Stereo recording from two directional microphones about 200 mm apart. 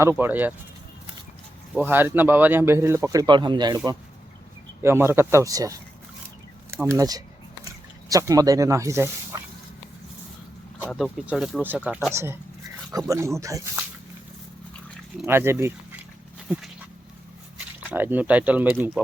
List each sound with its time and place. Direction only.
0.0 s speech: 10° right (ahead or behind)
1.7 s speech: 10° right (ahead or behind)
6.8 s speech: 15° right (ahead or behind)
10.8 s speech: 5° right (ahead or behind)
15.3 s speech: 10° right (ahead or behind)
17.8 s speech: 10° right (ahead or behind)